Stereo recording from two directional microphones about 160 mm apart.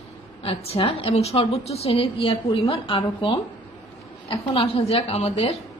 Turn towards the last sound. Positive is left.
turn(degrees=40)  # may be behind; listen again after turning